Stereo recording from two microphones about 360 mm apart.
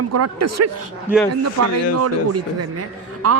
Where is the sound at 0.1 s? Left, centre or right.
Right.